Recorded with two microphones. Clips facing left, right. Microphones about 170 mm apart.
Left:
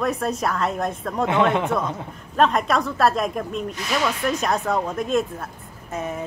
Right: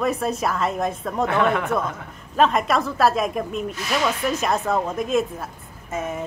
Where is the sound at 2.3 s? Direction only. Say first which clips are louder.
Even; centre (ahead or behind).